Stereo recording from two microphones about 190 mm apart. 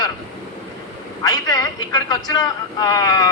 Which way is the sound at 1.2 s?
20° left (ahead or behind).